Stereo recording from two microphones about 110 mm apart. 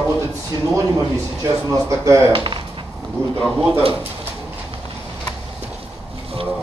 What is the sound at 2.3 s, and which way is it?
Speech, 50° right (ahead or behind).